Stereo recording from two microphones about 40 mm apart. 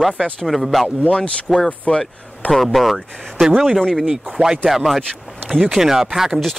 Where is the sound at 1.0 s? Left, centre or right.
Left.